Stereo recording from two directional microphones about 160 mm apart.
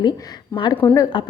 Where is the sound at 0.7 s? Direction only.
10° left (ahead or behind).